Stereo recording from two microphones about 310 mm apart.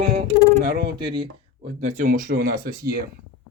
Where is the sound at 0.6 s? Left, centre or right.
Right.